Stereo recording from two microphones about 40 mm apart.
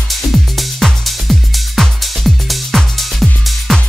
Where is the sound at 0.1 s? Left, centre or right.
Centre.